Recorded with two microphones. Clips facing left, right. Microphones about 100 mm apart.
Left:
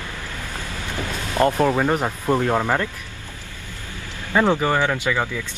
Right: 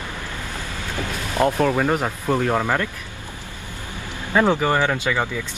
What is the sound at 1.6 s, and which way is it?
Speech, 10° left (ahead or behind).